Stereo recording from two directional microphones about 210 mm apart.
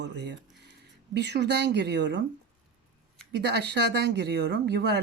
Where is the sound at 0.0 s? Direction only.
55° right (ahead or behind).